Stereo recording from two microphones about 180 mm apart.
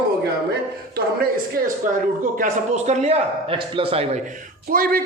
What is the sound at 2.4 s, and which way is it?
A man's voice, 40° right (ahead or behind).